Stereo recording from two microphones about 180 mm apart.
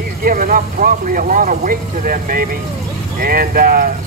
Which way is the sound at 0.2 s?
50° right (ahead or behind).